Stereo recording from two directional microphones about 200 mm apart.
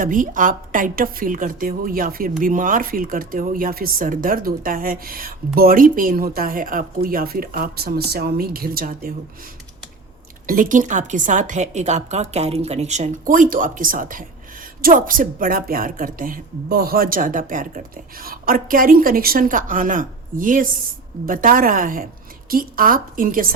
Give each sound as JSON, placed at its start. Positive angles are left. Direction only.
{"t": 0.0, "sound": "speech", "side_deg": -40}
{"t": 10.4, "sound": "a woman's voice", "side_deg": -45}